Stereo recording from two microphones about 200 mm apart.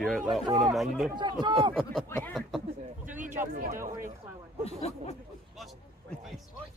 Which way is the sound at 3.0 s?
40° right (ahead or behind).